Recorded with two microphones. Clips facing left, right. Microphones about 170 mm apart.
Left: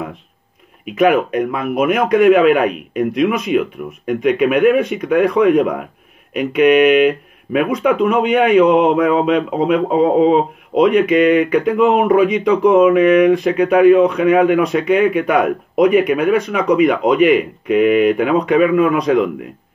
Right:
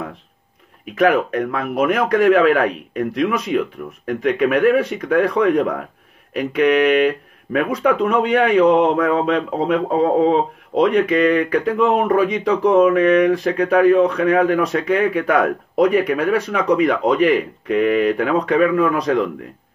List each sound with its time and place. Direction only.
0.9 s speech: 10° left (ahead or behind)